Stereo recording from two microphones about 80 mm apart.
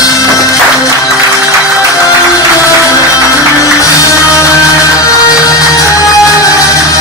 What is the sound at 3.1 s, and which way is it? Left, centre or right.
Music, left.